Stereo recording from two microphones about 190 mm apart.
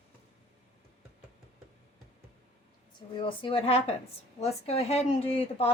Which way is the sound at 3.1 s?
25° left (ahead or behind).